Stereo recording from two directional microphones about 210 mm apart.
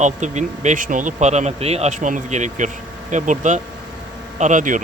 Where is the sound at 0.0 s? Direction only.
35° right (ahead or behind).